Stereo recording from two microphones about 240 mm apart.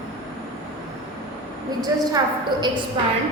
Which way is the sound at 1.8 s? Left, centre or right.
Centre.